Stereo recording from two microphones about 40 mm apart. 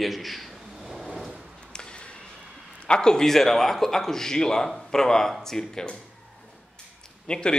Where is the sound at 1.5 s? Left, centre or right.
Left.